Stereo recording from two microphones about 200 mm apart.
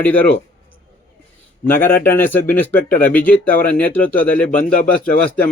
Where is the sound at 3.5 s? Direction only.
45° left (ahead or behind).